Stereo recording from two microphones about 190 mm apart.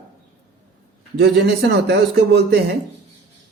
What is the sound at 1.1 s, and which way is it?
A man's voice, 60° right (ahead or behind).